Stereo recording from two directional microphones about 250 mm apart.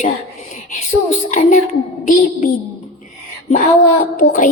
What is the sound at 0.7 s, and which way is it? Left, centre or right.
Speech, left.